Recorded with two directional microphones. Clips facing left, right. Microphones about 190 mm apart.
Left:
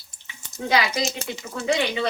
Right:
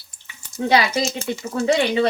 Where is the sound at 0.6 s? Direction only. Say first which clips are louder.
Right 4 dB; 35° right (ahead or behind).